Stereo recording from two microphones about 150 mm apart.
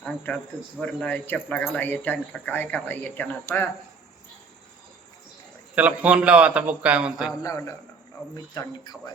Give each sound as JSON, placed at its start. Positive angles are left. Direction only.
{"t": 0.0, "sound": "speech", "side_deg": 10}
{"t": 5.7, "sound": "a man's voice", "side_deg": -10}
{"t": 8.5, "sound": "speech", "side_deg": 25}